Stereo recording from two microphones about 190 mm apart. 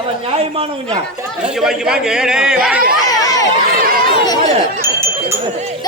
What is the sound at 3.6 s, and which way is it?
Chatter, 50° right (ahead or behind).